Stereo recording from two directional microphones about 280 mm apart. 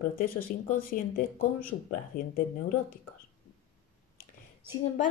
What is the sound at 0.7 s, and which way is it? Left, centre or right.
Speech, left.